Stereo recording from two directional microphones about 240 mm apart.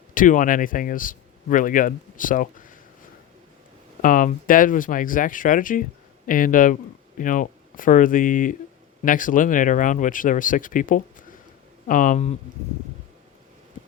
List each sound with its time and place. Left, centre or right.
0.1 s speech: left
4.0 s speech: left